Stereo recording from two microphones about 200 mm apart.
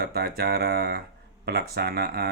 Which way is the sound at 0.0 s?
50° right (ahead or behind).